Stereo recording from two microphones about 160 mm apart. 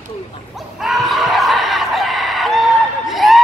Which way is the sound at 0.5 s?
Centre (ahead or behind).